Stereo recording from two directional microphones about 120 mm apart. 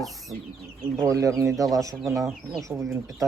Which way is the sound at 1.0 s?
30° right (ahead or behind).